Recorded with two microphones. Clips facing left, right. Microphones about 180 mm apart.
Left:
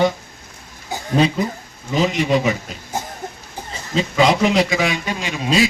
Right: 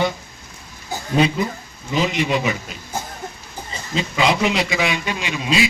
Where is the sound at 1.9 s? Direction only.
40° left (ahead or behind).